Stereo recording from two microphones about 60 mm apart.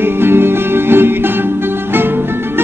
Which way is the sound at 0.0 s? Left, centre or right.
Right.